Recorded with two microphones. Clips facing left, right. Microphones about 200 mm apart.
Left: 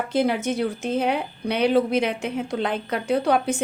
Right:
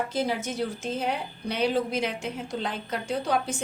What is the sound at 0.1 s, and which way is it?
Speech, 60° left (ahead or behind).